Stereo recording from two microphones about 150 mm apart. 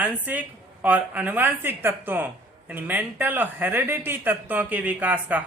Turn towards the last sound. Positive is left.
turn(degrees=-10)  # may be behind; listen again after turning